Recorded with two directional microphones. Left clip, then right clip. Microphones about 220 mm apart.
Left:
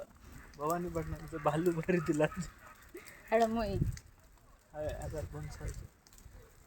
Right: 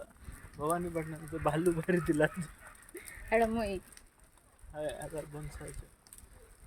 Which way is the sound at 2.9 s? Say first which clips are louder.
Right 1 dB; 5° right (ahead or behind).